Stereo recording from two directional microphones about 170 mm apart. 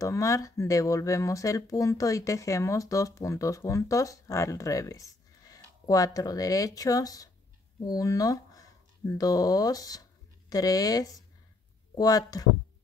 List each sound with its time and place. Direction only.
0.0 s speech: 20° left (ahead or behind)